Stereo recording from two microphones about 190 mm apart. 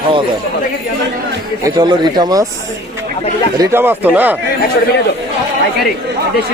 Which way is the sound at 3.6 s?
10° right (ahead or behind).